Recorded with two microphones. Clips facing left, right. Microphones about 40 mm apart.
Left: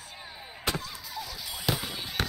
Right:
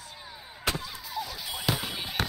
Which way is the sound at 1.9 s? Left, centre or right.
Centre.